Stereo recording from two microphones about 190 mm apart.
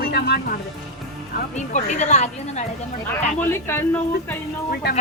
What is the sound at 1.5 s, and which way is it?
A woman's voice, 40° left (ahead or behind).